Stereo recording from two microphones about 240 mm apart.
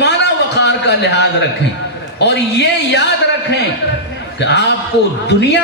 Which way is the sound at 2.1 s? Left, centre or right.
Left.